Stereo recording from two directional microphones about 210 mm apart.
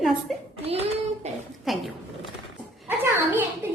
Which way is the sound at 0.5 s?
30° right (ahead or behind).